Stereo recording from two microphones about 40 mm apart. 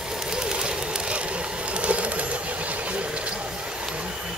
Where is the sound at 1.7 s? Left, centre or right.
Right.